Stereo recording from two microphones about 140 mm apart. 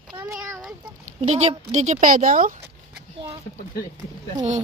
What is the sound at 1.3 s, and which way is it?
A woman's voice, 55° right (ahead or behind).